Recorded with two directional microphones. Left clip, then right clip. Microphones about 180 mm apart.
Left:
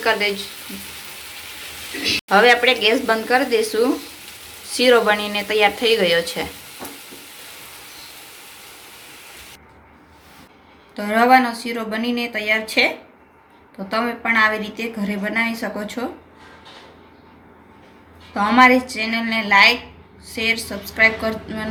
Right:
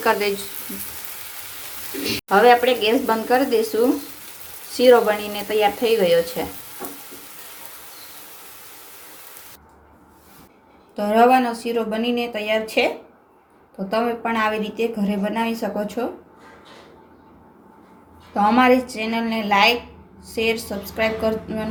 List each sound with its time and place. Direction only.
0.0 s a woman's voice: 30° right (ahead or behind)
2.3 s a woman's voice: 20° right (ahead or behind)
10.9 s a woman's voice: 30° right (ahead or behind)
13.9 s a woman's voice: 30° right (ahead or behind)
18.3 s a woman's voice: 35° right (ahead or behind)